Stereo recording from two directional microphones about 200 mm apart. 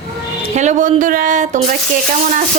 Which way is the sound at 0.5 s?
40° right (ahead or behind).